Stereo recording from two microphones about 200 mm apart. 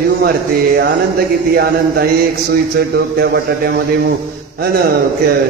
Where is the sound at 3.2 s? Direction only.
50° right (ahead or behind).